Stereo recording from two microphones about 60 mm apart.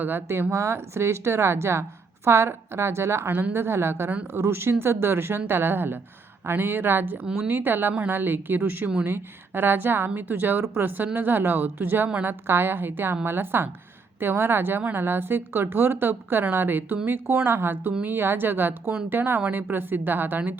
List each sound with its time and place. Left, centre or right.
0.0 s a woman's voice: right
0.5 s a woman's voice: right